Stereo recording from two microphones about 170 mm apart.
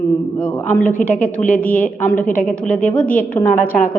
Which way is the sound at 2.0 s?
50° left (ahead or behind).